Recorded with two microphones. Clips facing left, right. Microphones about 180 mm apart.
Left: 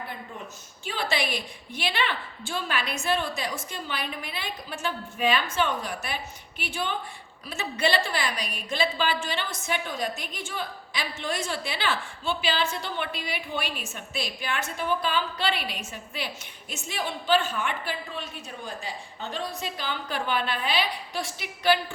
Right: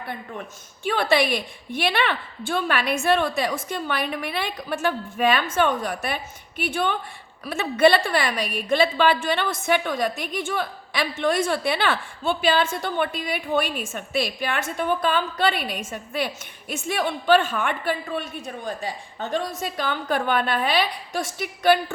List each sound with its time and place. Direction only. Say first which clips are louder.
0.9 s a woman's voice: right 8 dB; 60° right (ahead or behind)